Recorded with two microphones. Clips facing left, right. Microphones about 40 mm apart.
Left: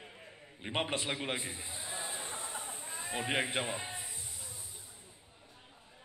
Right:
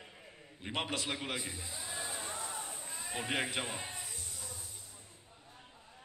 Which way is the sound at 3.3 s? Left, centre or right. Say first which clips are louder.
Left 2 dB; left.